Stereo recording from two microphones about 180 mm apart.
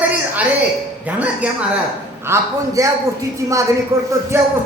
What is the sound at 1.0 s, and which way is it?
A woman's voice, 10° right (ahead or behind).